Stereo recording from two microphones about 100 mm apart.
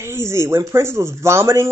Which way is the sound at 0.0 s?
25° right (ahead or behind).